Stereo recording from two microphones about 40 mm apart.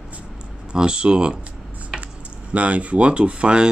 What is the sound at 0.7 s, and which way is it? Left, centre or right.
Speech, right.